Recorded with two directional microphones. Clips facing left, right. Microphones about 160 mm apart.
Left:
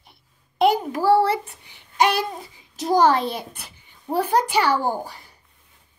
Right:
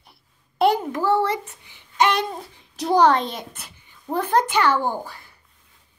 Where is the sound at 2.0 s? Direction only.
5° left (ahead or behind).